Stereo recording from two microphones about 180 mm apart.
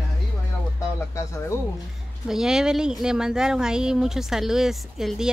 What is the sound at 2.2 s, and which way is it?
Speech, 5° right (ahead or behind).